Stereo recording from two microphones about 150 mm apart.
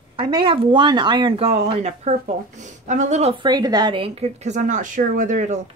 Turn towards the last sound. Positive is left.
turn(degrees=-55)  # may be behind; listen again after turning